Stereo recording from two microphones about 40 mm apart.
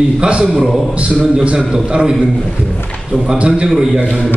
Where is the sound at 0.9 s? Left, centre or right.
Right.